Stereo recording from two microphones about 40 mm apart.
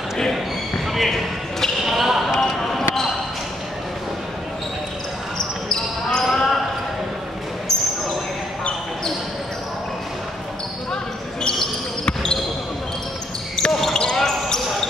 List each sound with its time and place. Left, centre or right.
0.9 s basketball bounce: centre
5.7 s basketball bounce: centre
6.3 s basketball bounce: centre
12.1 s basketball bounce: centre
13.6 s basketball bounce: centre